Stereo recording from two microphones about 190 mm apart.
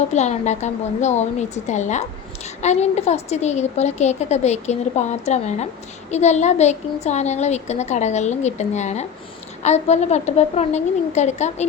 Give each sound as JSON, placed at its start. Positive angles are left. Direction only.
{"t": 0.1, "sound": "a woman's voice", "side_deg": 35}